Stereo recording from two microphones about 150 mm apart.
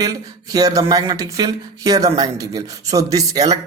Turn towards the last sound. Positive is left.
turn(degrees=-25)  # may be behind; listen again after turning